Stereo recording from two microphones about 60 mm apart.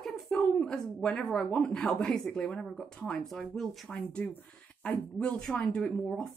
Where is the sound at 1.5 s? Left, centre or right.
Centre.